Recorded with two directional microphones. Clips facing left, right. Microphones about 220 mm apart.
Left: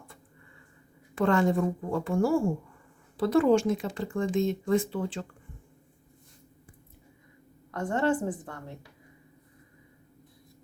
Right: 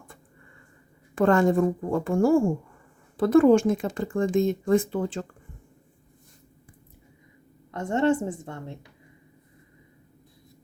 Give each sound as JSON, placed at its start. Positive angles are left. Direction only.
{"t": 1.1, "sound": "speech", "side_deg": -50}
{"t": 7.7, "sound": "a woman's voice", "side_deg": -25}